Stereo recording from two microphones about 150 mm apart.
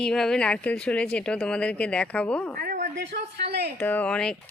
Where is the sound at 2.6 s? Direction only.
75° right (ahead or behind).